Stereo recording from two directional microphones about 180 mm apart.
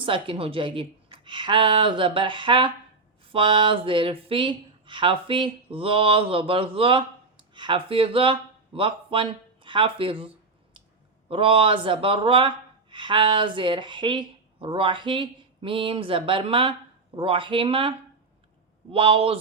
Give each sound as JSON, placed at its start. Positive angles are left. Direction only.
{"t": 0.0, "sound": "a man's voice", "side_deg": -30}